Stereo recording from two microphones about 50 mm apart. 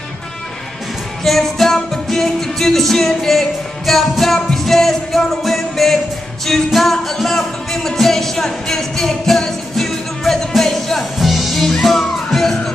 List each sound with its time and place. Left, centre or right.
1.2 s music: centre